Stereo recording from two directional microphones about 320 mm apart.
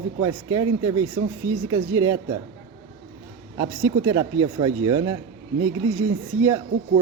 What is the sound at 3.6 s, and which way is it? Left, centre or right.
Speech, right.